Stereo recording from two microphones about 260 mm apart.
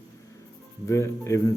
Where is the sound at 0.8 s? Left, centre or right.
Centre.